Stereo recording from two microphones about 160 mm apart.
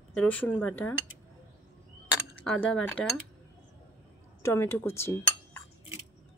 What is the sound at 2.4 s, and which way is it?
Speech, 10° left (ahead or behind).